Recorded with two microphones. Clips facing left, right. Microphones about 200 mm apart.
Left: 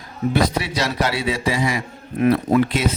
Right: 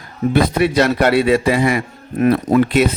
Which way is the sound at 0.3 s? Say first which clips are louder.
Right 7 dB; 55° right (ahead or behind).